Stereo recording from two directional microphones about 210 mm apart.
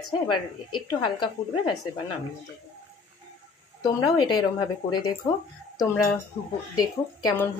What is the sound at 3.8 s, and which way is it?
A woman's voice, 20° left (ahead or behind).